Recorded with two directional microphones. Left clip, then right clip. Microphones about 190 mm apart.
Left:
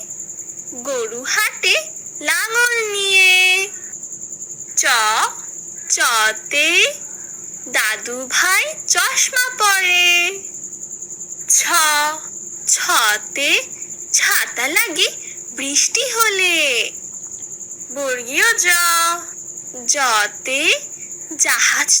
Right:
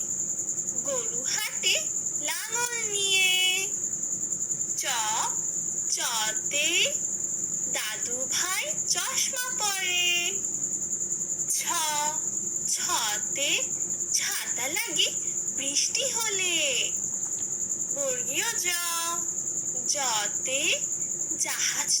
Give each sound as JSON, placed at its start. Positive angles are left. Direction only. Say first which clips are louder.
{"t": 0.9, "sound": "speech", "louder": "left 12 dB", "side_deg": 45}
{"t": 4.7, "sound": "speech", "louder": "left 15 dB", "side_deg": 45}
{"t": 11.4, "sound": "a sound", "louder": "left 15 dB", "side_deg": 45}
{"t": 12.6, "sound": "speech", "louder": "left 15 dB", "side_deg": 50}
{"t": 17.9, "sound": "speech", "louder": "left 12 dB", "side_deg": 45}